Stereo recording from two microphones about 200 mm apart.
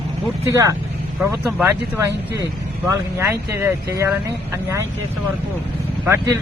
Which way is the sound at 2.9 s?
15° right (ahead or behind).